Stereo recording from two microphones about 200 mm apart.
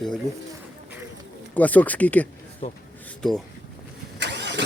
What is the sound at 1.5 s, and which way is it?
Speech, 10° left (ahead or behind).